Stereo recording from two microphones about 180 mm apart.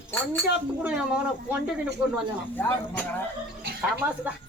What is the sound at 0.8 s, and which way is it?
Speech, 5° right (ahead or behind).